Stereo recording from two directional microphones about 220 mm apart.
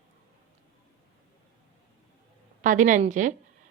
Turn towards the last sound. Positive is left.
turn(degrees=-35)  # may be behind; listen again after turning